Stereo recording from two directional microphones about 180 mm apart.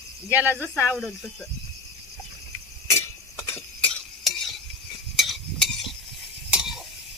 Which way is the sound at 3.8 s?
5° left (ahead or behind).